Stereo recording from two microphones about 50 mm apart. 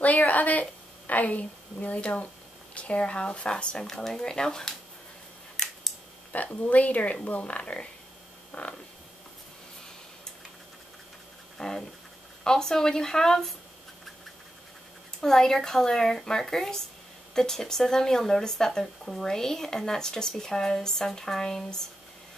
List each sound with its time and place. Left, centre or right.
0.0 s a woman's voice: left
3.8 s speech: centre
6.3 s speech: left
8.5 s a sound: left
11.5 s a sound: centre
12.4 s speech: centre
15.1 s speech: centre